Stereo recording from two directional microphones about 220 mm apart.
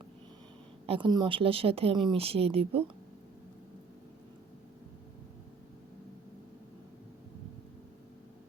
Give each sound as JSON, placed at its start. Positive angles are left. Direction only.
{"t": 0.9, "sound": "speech", "side_deg": -20}